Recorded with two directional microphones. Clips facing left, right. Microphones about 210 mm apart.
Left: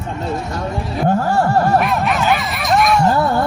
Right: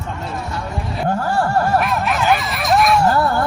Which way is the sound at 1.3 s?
25° left (ahead or behind).